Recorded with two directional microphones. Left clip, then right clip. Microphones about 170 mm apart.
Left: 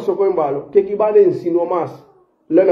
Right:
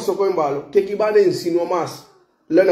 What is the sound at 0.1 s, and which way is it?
A man's voice, 10° right (ahead or behind).